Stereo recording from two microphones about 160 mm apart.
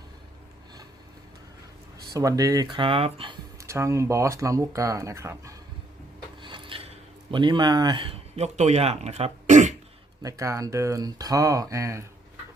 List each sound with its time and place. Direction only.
2.1 s speech: 20° right (ahead or behind)
3.6 s speech: 20° right (ahead or behind)
6.4 s a sound: 30° right (ahead or behind); by 9.7 s 50° right (ahead or behind)
10.2 s speech: 20° right (ahead or behind)